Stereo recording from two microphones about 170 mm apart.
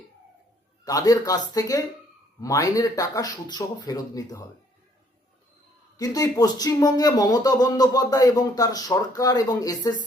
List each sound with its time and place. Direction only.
0.9 s speech: 20° left (ahead or behind)
6.0 s speech: 20° left (ahead or behind)